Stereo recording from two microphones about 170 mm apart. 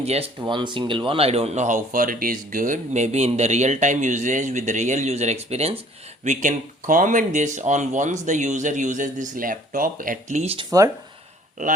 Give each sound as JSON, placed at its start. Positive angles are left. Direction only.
{"t": 0.0, "sound": "speech", "side_deg": -35}